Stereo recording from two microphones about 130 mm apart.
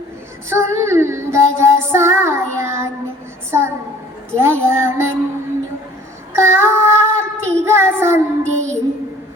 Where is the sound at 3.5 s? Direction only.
20° right (ahead or behind).